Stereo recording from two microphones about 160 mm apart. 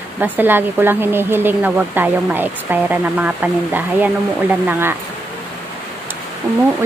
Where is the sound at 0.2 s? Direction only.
10° right (ahead or behind).